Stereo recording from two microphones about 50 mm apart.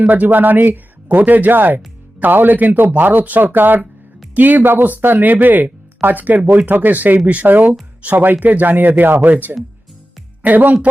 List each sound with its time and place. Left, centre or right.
0.0 s speech: right
1.0 s speech: right